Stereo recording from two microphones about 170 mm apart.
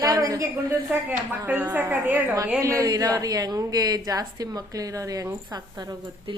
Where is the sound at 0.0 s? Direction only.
20° right (ahead or behind).